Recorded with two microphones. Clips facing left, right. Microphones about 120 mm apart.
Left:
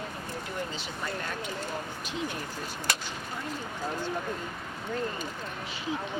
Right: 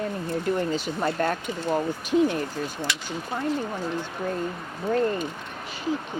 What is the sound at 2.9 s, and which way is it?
Speech, 45° left (ahead or behind).